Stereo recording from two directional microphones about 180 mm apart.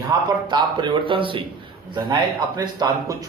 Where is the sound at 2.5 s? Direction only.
20° right (ahead or behind).